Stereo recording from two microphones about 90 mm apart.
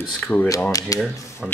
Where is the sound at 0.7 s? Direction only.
40° left (ahead or behind).